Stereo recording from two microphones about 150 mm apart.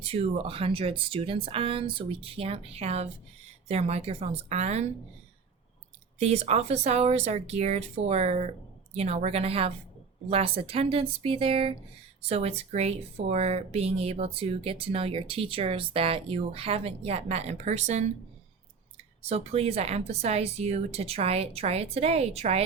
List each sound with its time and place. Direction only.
0.0 s speech: 40° right (ahead or behind)
6.1 s speech: 45° right (ahead or behind)
19.2 s speech: 45° right (ahead or behind)